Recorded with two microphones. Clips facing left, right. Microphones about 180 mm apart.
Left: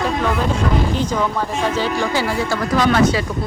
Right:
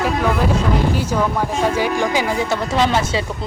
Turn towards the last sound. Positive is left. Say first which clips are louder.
# left 2 dB
turn(degrees=-25)  # may be behind; listen again after turning